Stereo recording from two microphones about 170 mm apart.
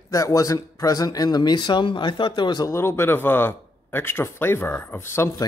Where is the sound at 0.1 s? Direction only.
20° left (ahead or behind).